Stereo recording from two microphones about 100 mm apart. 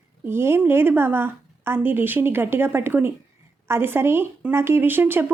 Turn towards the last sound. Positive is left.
turn(degrees=-20)  # may be behind; listen again after turning